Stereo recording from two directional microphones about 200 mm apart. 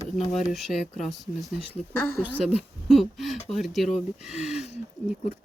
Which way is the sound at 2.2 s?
Centre (ahead or behind).